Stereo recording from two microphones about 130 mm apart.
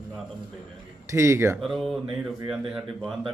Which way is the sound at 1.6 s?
Centre (ahead or behind).